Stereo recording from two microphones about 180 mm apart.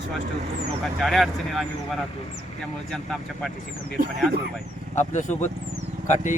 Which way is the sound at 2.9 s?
Centre (ahead or behind).